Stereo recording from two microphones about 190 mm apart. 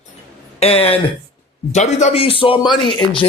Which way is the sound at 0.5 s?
30° left (ahead or behind).